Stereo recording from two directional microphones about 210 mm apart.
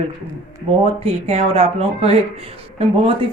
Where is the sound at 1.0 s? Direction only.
30° right (ahead or behind).